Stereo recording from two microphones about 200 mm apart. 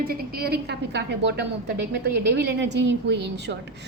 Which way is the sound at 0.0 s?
50° right (ahead or behind).